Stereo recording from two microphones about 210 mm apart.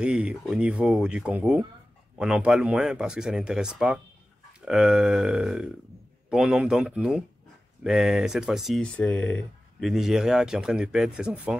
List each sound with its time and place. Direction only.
0.0 s speech: 5° right (ahead or behind)